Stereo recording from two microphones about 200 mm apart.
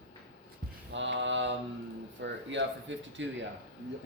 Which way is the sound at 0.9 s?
65° right (ahead or behind).